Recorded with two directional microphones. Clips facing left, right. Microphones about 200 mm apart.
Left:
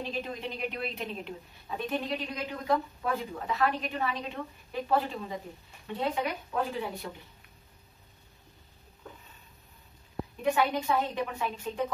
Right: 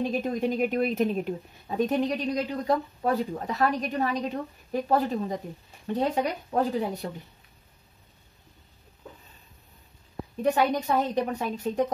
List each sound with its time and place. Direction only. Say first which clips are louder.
0.0 s a woman's voice: right 9 dB; 45° right (ahead or behind)
10.4 s a woman's voice: right 4 dB; 40° right (ahead or behind)